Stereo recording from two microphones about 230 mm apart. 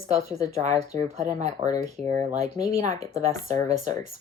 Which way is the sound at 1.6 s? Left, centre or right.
Centre.